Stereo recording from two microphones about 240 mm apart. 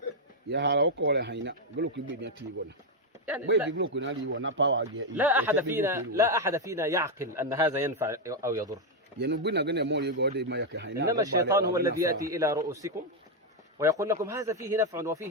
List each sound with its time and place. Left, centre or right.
0.5 s speech: right
3.7 s speech: right
5.1 s speech: centre
9.1 s speech: right
11.1 s speech: centre